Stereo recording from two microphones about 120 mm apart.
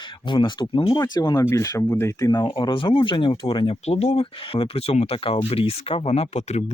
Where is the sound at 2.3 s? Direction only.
40° left (ahead or behind); by 6.6 s 70° left (ahead or behind).